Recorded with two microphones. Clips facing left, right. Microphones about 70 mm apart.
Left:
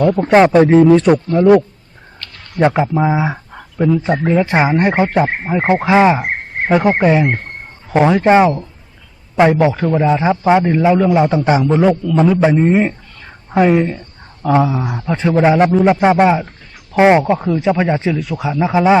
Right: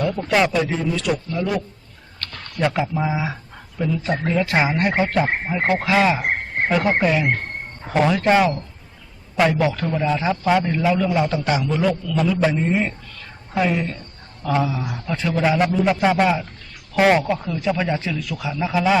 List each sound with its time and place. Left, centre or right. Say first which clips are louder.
0.2 s speech: left 10 dB; left
2.6 s a man's voice: left 8 dB; left